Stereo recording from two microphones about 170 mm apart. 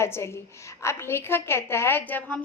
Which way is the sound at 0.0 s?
15° left (ahead or behind).